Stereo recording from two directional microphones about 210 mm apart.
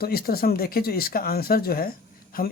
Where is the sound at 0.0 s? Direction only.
45° left (ahead or behind).